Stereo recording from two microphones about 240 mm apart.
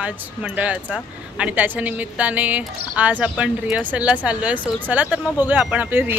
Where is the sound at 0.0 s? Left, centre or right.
Centre.